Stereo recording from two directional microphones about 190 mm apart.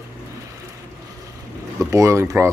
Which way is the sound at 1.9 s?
15° right (ahead or behind).